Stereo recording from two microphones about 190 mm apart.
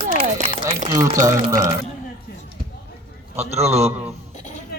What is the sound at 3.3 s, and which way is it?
Speech, 35° right (ahead or behind).